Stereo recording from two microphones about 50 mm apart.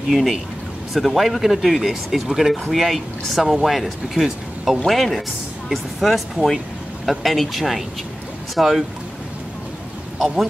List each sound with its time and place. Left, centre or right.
0.1 s speech: centre
10.1 s speech: centre